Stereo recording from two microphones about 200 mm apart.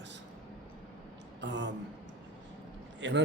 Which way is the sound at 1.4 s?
60° right (ahead or behind).